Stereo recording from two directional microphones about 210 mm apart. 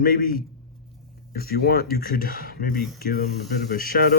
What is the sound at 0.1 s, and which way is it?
Speech, 45° left (ahead or behind).